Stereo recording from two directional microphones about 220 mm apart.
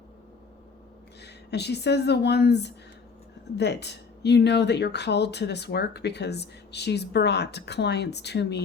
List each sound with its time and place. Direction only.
1.2 s speech: 50° left (ahead or behind)